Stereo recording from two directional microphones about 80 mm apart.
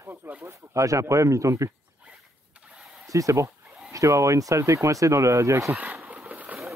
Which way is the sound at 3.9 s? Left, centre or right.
Right.